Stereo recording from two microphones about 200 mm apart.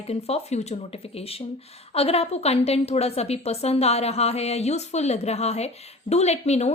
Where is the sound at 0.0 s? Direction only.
30° left (ahead or behind).